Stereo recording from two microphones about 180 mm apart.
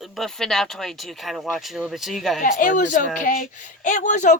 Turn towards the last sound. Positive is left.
turn(degrees=45)  # may be behind; listen again after turning